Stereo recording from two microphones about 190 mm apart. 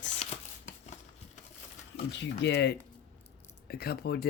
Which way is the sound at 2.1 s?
65° left (ahead or behind).